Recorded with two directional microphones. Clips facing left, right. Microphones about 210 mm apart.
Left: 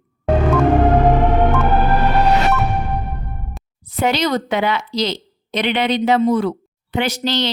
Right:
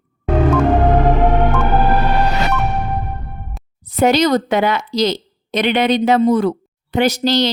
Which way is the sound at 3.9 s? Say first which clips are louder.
Right 5 dB; 45° right (ahead or behind).